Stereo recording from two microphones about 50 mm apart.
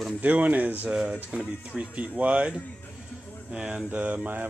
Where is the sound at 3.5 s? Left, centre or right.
Centre.